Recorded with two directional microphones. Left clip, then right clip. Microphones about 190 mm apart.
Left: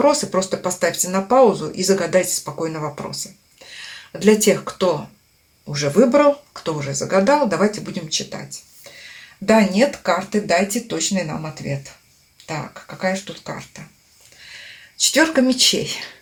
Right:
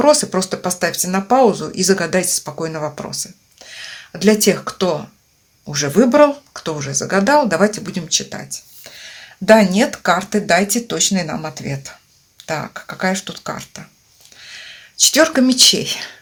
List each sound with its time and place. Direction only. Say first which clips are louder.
0.0 s speech: right 3 dB; 40° right (ahead or behind)
13.0 s speech: right 2 dB; 45° right (ahead or behind)
14.9 s speech: right 3 dB; 35° right (ahead or behind)